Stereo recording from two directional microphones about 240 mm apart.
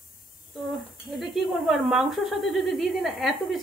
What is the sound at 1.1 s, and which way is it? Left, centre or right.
Speech, centre.